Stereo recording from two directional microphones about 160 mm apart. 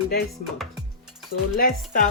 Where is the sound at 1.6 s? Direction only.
55° left (ahead or behind).